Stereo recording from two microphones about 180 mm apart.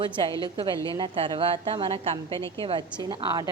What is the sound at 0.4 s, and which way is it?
A woman's voice, 25° right (ahead or behind).